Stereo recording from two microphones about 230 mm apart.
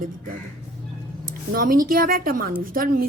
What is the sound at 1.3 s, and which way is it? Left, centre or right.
A woman's voice, right.